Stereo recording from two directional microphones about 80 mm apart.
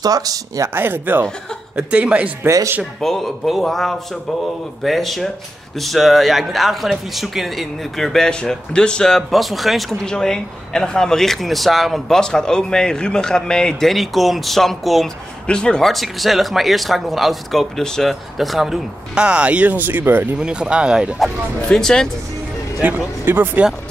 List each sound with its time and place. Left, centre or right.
0.0 s speech: right
0.7 s speech: right
1.8 s speech: centre
2.4 s speech: right
3.0 s a man's voice: centre; by 20.2 s right
20.3 s speech: centre
21.2 s a man's voice: centre
22.8 s speech: right